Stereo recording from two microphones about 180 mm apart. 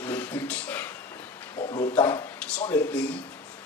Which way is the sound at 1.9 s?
10° left (ahead or behind).